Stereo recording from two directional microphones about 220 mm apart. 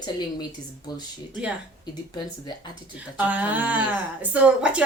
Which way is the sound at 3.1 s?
5° right (ahead or behind).